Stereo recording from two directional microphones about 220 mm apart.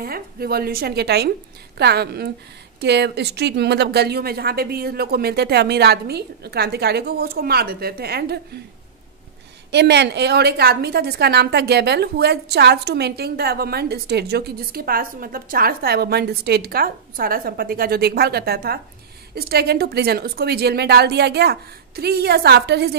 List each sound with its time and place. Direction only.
0.0 s a woman's voice: 45° right (ahead or behind)
9.7 s a woman's voice: 50° right (ahead or behind)